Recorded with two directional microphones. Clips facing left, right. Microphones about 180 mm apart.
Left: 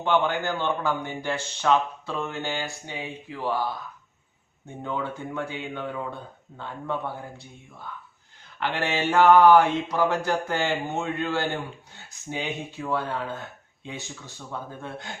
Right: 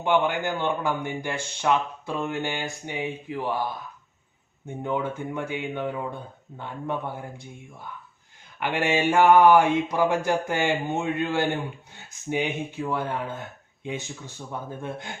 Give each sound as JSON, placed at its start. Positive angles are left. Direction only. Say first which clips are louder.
{"t": 0.0, "sound": "a man's voice", "louder": "right 1 dB", "side_deg": -15}
{"t": 4.8, "sound": "a man's voice", "louder": "right 3 dB", "side_deg": -15}